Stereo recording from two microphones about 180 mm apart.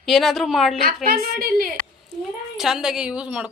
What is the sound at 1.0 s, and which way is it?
Speech, 55° right (ahead or behind).